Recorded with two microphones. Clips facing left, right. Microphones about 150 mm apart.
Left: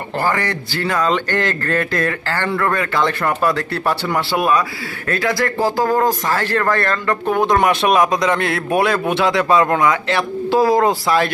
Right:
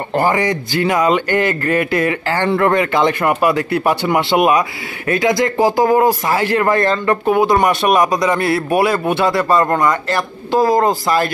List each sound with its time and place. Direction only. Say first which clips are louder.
0.1 s speech: right 4 dB; 20° right (ahead or behind)
7.2 s a man's voice: right 1 dB; 5° right (ahead or behind)